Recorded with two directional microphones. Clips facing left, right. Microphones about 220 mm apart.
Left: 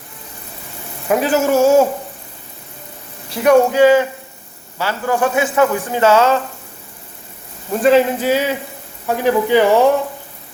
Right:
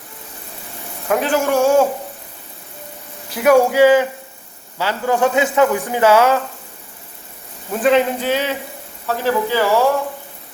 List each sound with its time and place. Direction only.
1.0 s speech: 5° left (ahead or behind)
3.3 s a man's voice: 5° right (ahead or behind)
3.7 s speech: 15° right (ahead or behind)
7.7 s a man's voice: centre (ahead or behind); by 9.9 s 20° left (ahead or behind)